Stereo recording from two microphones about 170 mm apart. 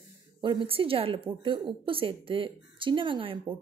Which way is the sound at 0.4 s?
30° right (ahead or behind).